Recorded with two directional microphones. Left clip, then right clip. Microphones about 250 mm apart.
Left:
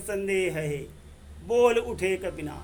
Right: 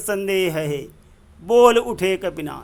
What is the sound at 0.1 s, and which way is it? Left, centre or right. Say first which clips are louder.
A man's voice: right 6 dB; centre.